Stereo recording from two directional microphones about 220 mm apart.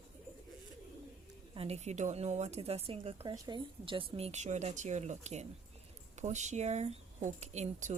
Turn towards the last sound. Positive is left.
turn(degrees=-30)  # may be behind; listen again after turning